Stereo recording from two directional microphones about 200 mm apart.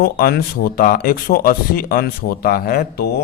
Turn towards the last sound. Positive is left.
turn(degrees=50)  # may be behind; listen again after turning